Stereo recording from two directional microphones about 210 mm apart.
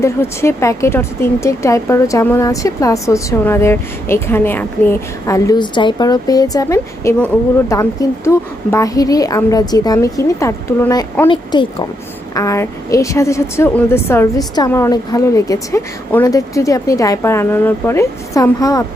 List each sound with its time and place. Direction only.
0.0 s speech: 15° left (ahead or behind)
11.3 s speech: 25° left (ahead or behind)